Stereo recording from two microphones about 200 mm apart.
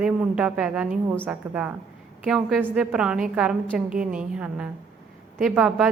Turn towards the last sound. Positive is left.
turn(degrees=-5)  # may be behind; listen again after turning